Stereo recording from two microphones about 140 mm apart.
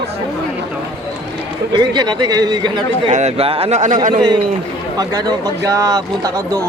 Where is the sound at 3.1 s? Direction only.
55° right (ahead or behind).